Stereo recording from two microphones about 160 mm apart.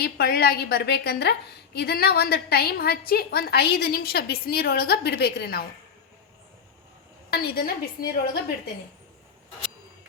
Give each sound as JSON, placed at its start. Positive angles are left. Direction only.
{"t": 0.0, "sound": "a woman's voice", "side_deg": 75}
{"t": 7.3, "sound": "a woman's voice", "side_deg": 80}